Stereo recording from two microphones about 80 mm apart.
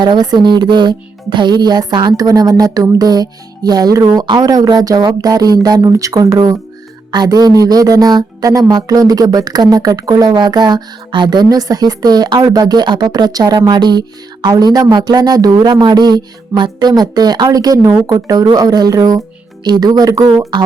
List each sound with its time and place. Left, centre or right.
0.0 s speech: right
11.4 s speech: right
16.9 s speech: right